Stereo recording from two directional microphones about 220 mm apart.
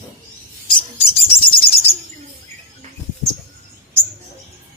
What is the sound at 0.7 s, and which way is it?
Bird, 25° left (ahead or behind).